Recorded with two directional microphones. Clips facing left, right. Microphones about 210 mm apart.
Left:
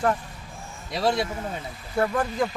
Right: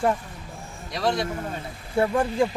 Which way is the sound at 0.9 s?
5° left (ahead or behind).